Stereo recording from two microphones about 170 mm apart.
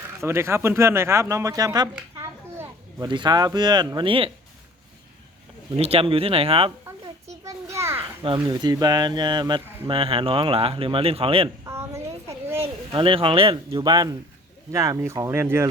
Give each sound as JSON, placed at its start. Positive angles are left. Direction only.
{"t": 0.2, "sound": "a child's voice", "side_deg": -15}
{"t": 5.7, "sound": "speech", "side_deg": -35}
{"t": 7.4, "sound": "a sound", "side_deg": -15}
{"t": 8.4, "sound": "speech", "side_deg": -25}
{"t": 11.6, "sound": "a sound", "side_deg": -15}
{"t": 12.9, "sound": "speech", "side_deg": -30}